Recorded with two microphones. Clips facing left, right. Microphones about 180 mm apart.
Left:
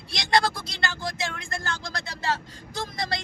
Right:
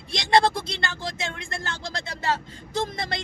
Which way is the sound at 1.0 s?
25° right (ahead or behind).